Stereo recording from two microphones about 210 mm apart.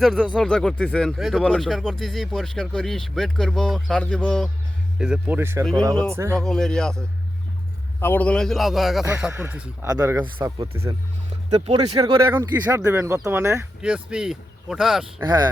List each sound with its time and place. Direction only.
0.0 s speech: centre (ahead or behind)
6.3 s speech: centre (ahead or behind)
8.0 s speech: 10° left (ahead or behind); by 10.2 s 15° right (ahead or behind)
11.5 s speech: 25° right (ahead or behind)
12.3 s speech: 10° right (ahead or behind)
15.2 s speech: 20° right (ahead or behind)